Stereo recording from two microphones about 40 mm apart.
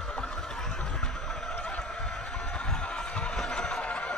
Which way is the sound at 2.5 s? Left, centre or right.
Left.